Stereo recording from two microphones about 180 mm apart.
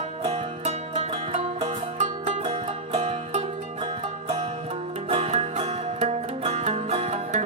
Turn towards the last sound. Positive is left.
turn(degrees=-35)  # may be behind; listen again after turning